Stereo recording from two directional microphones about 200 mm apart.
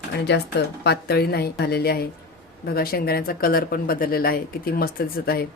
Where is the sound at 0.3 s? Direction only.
55° left (ahead or behind).